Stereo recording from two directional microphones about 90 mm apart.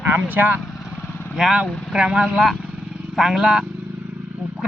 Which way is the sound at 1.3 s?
5° right (ahead or behind).